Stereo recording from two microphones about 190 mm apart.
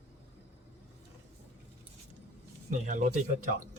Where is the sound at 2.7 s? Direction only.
40° right (ahead or behind).